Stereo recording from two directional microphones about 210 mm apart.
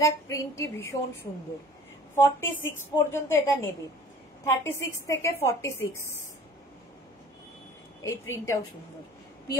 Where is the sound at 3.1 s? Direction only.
10° left (ahead or behind).